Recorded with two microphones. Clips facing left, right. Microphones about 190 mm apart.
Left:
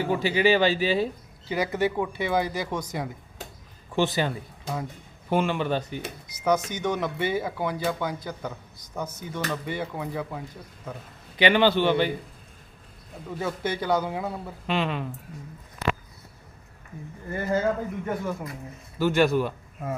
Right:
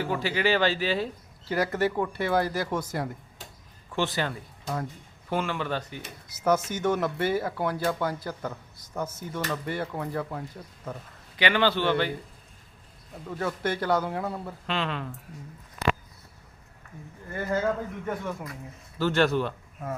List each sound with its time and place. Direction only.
0.0 s speech: 15° left (ahead or behind)
1.5 s speech: centre (ahead or behind)
3.9 s speech: 15° left (ahead or behind)
6.3 s speech: 5° right (ahead or behind)
11.3 s speech: 20° left (ahead or behind)
13.3 s speech: centre (ahead or behind)
18.0 s speech: 5° left (ahead or behind)